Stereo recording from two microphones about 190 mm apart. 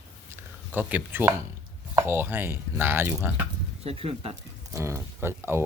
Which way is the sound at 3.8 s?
30° right (ahead or behind).